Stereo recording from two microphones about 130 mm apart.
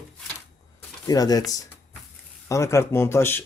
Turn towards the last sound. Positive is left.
turn(degrees=20)  # may be behind; listen again after turning